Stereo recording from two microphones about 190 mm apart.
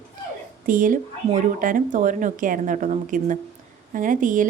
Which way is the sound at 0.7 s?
45° right (ahead or behind).